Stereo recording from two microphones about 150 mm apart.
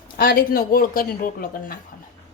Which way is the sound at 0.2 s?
75° left (ahead or behind).